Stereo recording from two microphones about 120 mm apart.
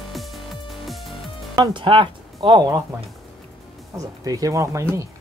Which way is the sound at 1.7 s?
45° right (ahead or behind).